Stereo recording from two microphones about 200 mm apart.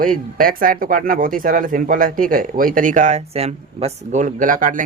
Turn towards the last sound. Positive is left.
turn(degrees=-40)  # may be behind; listen again after turning